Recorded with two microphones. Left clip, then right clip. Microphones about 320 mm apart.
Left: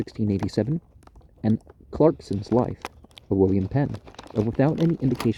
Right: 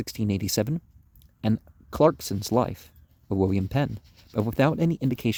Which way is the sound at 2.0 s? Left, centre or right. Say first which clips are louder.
Left 1 dB; right.